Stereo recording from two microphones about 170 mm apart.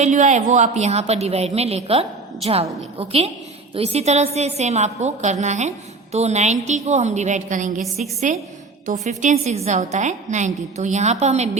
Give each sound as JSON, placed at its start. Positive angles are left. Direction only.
{"t": 0.0, "sound": "a woman's voice", "side_deg": -45}